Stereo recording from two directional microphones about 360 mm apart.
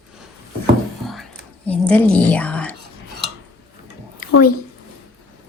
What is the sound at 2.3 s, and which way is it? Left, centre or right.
Whispering, centre.